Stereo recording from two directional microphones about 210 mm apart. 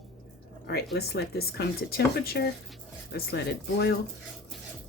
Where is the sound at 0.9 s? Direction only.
50° left (ahead or behind).